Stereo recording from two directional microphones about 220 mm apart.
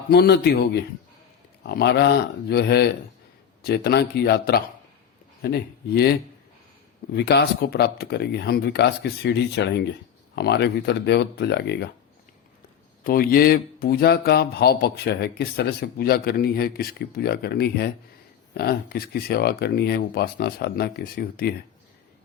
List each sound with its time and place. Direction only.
0.1 s speech: 50° left (ahead or behind)
13.1 s speech: 40° left (ahead or behind)